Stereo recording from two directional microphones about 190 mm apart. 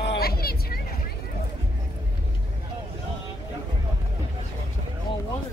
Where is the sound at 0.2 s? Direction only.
55° left (ahead or behind).